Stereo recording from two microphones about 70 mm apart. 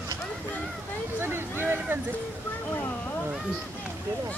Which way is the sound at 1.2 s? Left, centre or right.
Right.